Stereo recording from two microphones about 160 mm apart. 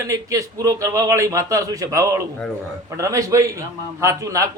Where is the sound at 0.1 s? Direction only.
20° right (ahead or behind).